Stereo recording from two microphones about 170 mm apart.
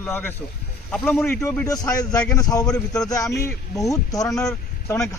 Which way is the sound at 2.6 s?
5° left (ahead or behind).